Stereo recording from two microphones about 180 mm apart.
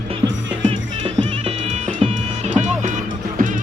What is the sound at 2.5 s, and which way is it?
Music, 40° right (ahead or behind).